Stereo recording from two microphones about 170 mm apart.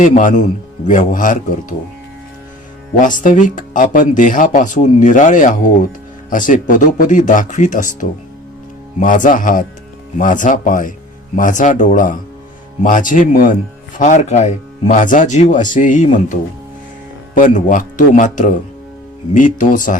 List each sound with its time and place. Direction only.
0.0 s speech: 50° left (ahead or behind)
2.9 s speech: 50° left (ahead or behind)
9.0 s speech: 50° left (ahead or behind)